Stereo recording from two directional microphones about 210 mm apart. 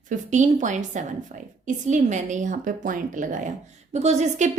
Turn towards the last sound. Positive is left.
turn(degrees=-30)  # may be behind; listen again after turning